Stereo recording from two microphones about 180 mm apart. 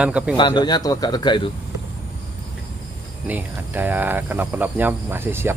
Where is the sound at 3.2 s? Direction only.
10° right (ahead or behind).